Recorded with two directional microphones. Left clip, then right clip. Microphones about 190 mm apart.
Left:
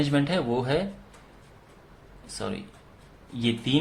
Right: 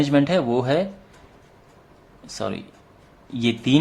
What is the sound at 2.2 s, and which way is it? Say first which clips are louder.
Speech: right 6 dB; 35° right (ahead or behind).